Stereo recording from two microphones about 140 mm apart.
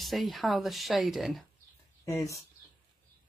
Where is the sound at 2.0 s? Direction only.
25° left (ahead or behind).